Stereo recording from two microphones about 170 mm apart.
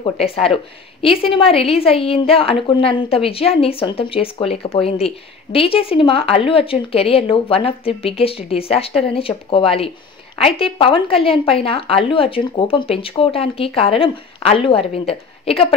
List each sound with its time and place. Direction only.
0.0 s a woman's voice: 35° left (ahead or behind)